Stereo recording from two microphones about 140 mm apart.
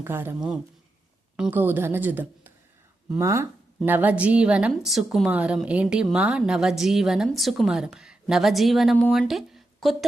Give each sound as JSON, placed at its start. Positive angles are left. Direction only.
{"t": 0.0, "sound": "a woman's voice", "side_deg": -15}
{"t": 1.4, "sound": "a woman's voice", "side_deg": -10}